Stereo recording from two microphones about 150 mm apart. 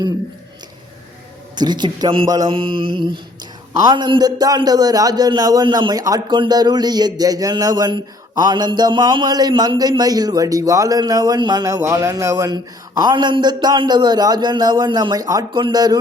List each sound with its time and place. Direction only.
1.5 s a man's voice: 30° right (ahead or behind)
2.2 s mantra: 25° right (ahead or behind)
3.8 s a man's voice: 30° right (ahead or behind)